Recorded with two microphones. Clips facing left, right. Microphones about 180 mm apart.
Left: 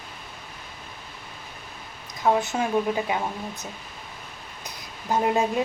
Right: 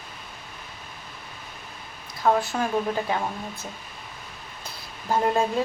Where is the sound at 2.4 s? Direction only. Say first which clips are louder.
Left 1 dB; 20° left (ahead or behind).